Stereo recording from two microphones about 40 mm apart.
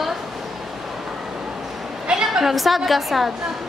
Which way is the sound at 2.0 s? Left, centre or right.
Right.